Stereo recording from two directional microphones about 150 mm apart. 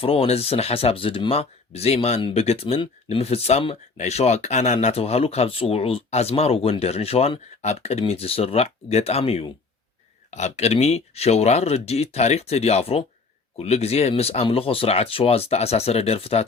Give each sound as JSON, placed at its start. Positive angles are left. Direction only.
{"t": 0.0, "sound": "speech", "side_deg": 40}